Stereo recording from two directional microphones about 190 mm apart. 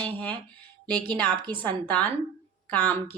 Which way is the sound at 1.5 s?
10° left (ahead or behind).